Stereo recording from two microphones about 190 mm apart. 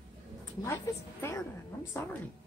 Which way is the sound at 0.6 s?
15° left (ahead or behind).